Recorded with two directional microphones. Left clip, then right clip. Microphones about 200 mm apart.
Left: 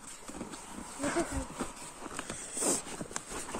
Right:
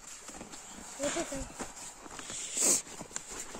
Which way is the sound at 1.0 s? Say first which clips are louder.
Left 1 dB; 10° right (ahead or behind).